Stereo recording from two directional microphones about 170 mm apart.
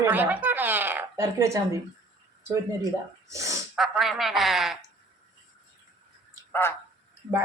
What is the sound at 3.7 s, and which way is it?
Speech, centre (ahead or behind).